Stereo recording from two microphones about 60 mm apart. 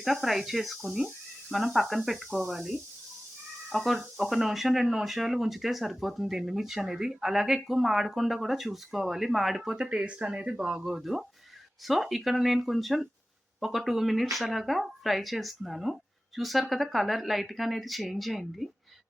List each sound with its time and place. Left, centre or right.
0.0 s speech: centre
9.7 s speech: centre
10.8 s speech: centre